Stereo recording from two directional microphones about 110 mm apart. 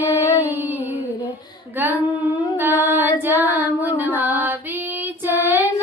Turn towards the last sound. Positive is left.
turn(degrees=-20)  # may be behind; listen again after turning